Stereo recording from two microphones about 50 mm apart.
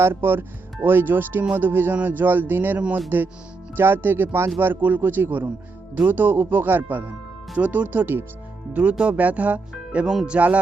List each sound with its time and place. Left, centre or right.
0.0 s a man's voice: right